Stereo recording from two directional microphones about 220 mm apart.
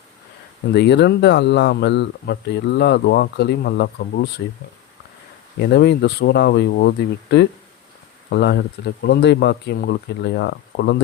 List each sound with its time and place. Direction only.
0.7 s speech: 50° left (ahead or behind)
5.5 s speech: 50° left (ahead or behind)